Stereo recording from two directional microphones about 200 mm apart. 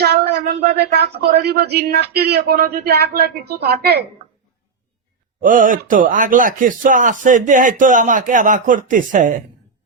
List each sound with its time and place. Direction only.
0.0 s a sound: 55° right (ahead or behind)
1.2 s speech: 55° right (ahead or behind)
5.4 s speech: 40° right (ahead or behind)